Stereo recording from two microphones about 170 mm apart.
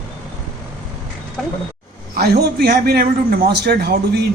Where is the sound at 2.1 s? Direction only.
70° right (ahead or behind).